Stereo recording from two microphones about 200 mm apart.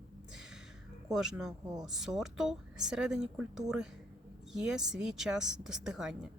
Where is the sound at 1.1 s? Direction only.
5° right (ahead or behind).